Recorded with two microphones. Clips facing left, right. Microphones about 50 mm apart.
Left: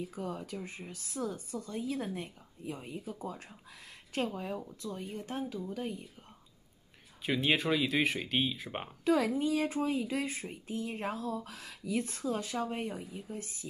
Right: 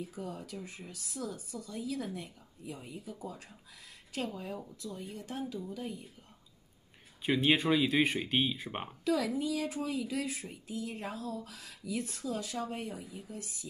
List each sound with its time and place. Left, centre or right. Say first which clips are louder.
0.1 s speech: left 3 dB; left
7.4 s speech: right 2 dB; centre
9.0 s speech: left 3 dB; left